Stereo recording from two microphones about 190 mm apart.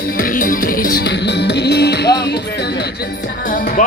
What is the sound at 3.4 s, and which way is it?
Music, 45° left (ahead or behind).